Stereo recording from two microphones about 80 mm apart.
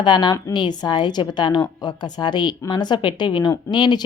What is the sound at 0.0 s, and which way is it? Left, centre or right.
A woman's voice, left.